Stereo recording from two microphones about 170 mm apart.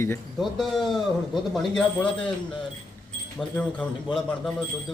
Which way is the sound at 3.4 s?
5° left (ahead or behind).